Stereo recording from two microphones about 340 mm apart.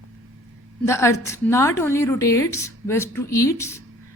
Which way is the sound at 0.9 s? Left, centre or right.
Centre.